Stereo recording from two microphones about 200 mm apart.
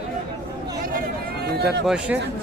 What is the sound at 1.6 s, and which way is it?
Speech, 55° right (ahead or behind).